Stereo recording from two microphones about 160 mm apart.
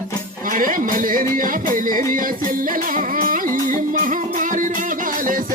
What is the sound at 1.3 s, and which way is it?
Music, 60° right (ahead or behind).